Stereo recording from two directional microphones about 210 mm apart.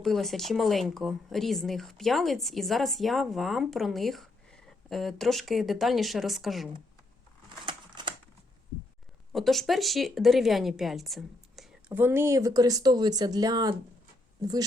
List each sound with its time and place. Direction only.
0.0 s speech: centre (ahead or behind)
7.6 s crumpling: 25° right (ahead or behind)
9.3 s speech: centre (ahead or behind); by 13.7 s 20° right (ahead or behind)